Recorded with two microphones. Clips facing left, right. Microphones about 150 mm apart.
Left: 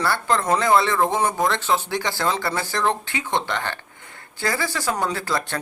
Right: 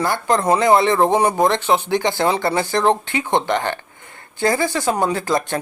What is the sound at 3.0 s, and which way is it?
Speech, 55° right (ahead or behind).